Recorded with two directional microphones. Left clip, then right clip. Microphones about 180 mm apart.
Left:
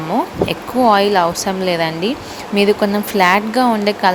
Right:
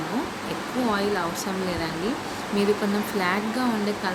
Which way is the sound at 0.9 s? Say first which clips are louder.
Left 12 dB; 55° left (ahead or behind).